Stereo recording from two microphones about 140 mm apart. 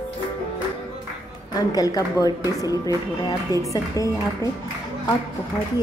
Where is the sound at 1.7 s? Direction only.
25° left (ahead or behind).